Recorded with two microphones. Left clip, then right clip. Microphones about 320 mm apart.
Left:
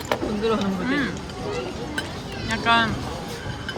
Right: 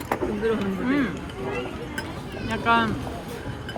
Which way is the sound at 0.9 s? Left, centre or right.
Centre.